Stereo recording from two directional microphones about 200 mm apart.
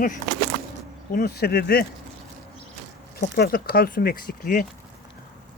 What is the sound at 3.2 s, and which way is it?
Speech, 50° left (ahead or behind).